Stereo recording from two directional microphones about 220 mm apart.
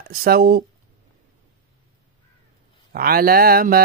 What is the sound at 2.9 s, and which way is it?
Speech, 40° right (ahead or behind).